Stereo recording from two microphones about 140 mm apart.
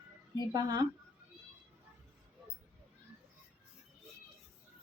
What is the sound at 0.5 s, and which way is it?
Speech, 30° right (ahead or behind).